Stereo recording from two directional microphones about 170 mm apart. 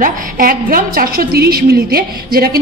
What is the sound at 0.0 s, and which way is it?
A woman's voice, 55° right (ahead or behind).